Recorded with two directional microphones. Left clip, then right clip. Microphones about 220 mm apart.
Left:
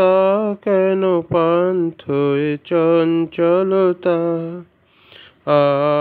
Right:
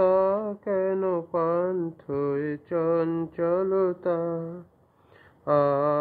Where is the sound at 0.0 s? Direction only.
30° left (ahead or behind).